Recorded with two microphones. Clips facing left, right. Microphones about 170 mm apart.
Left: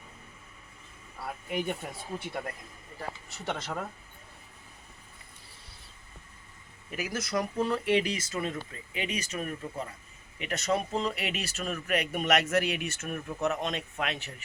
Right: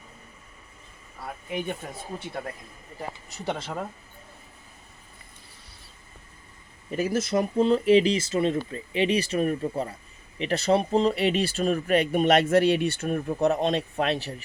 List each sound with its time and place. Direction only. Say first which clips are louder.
1.2 s speech: right 1 dB; centre (ahead or behind)
6.9 s speech: right 7 dB; 30° right (ahead or behind)